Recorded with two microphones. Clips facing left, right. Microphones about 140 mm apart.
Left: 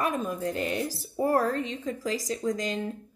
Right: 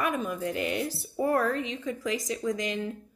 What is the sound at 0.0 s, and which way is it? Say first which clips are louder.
Speech: left 1 dB; 35° left (ahead or behind).